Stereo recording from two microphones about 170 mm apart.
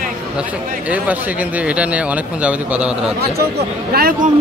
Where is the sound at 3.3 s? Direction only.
65° right (ahead or behind).